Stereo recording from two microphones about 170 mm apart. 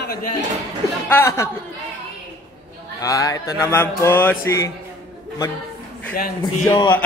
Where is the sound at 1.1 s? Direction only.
15° left (ahead or behind).